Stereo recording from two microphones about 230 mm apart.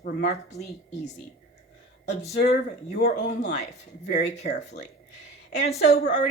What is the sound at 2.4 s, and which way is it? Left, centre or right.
A woman's voice, left.